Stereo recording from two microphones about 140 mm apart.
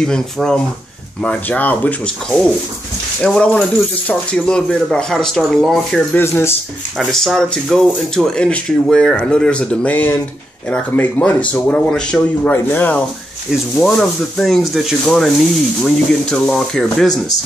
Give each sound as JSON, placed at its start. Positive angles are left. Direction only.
{"t": 0.0, "sound": "speech", "side_deg": 5}
{"t": 3.2, "sound": "speech", "side_deg": 5}
{"t": 6.1, "sound": "speech", "side_deg": 15}
{"t": 7.0, "sound": "speech", "side_deg": 0}
{"t": 13.5, "sound": "speech", "side_deg": 0}